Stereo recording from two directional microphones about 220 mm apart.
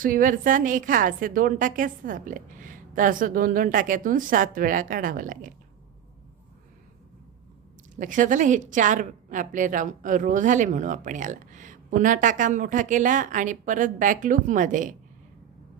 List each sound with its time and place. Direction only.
0.0 s a woman's voice: 40° right (ahead or behind)
7.9 s a woman's voice: 35° right (ahead or behind)